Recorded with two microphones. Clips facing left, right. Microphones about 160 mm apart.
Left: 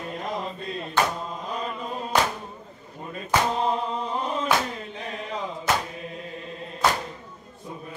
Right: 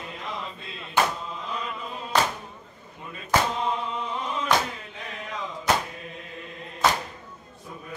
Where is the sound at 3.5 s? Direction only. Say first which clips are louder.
Left 3 dB; 35° left (ahead or behind).